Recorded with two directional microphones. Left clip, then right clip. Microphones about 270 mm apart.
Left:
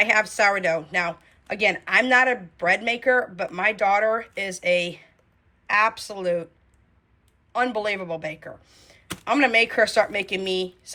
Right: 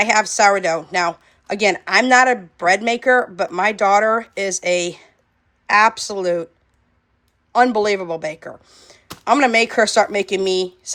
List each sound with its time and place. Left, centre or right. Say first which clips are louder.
0.0 s a woman's voice: right 5 dB; centre
7.5 s a woman's voice: right 9 dB; centre